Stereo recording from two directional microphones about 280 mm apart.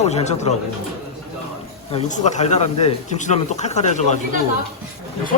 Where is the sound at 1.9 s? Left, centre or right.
Left.